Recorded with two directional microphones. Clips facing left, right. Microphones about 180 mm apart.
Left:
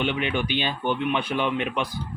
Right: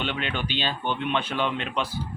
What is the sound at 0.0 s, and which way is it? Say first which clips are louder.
Speech: left 4 dB; 10° left (ahead or behind).